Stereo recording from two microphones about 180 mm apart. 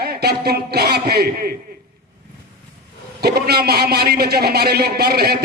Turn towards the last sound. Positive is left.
turn(degrees=-60)  # may be behind; listen again after turning